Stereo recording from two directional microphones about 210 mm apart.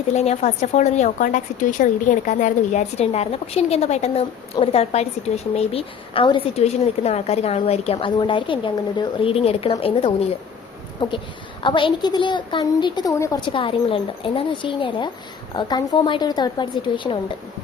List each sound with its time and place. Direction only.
0.1 s a woman's voice: 30° left (ahead or behind)
11.6 s a woman's voice: 25° left (ahead or behind)